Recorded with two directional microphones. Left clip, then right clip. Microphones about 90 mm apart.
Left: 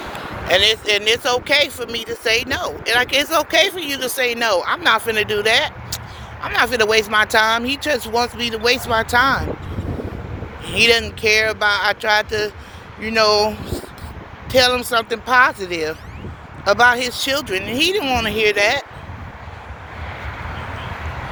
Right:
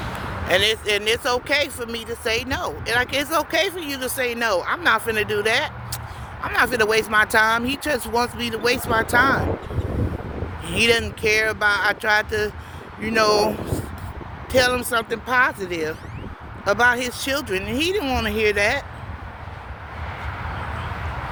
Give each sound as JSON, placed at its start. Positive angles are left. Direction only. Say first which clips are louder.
{"t": 0.4, "sound": "speech", "louder": "left 4 dB", "side_deg": -55}
{"t": 1.8, "sound": "speech", "louder": "left 4 dB", "side_deg": -50}
{"t": 2.9, "sound": "speech", "louder": "left 5 dB", "side_deg": -20}
{"t": 11.2, "sound": "speech", "louder": "left 3 dB", "side_deg": -55}
{"t": 13.0, "sound": "speech", "louder": "left 3 dB", "side_deg": -65}
{"t": 14.5, "sound": "speech", "louder": "left 4 dB", "side_deg": -55}
{"t": 15.3, "sound": "speech", "louder": "left 5 dB", "side_deg": -30}
{"t": 17.7, "sound": "speech", "louder": "left 6 dB", "side_deg": -25}